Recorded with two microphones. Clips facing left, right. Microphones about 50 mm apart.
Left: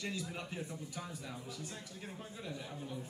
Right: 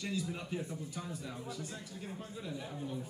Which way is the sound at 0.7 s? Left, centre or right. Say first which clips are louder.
Right 2 dB; centre.